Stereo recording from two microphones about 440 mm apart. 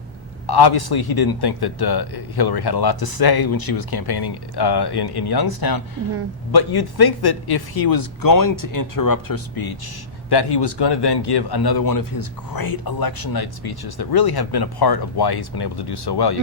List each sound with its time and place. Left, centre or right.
0.4 s a man's voice: left
10.2 s a man's voice: left